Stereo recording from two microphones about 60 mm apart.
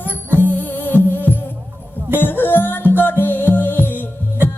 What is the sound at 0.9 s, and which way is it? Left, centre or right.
Music, left.